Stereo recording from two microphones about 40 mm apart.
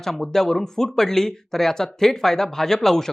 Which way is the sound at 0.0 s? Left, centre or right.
Centre.